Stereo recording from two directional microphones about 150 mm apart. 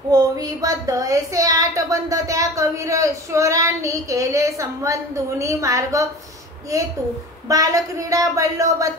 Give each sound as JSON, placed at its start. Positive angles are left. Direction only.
{"t": 0.1, "sound": "speech", "side_deg": -25}